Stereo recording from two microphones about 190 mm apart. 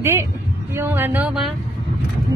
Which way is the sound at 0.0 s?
15° right (ahead or behind).